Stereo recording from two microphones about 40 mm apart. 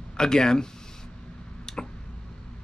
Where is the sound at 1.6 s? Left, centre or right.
Centre.